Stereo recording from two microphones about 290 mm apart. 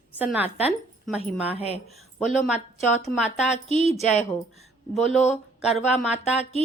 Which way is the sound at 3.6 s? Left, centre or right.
Centre.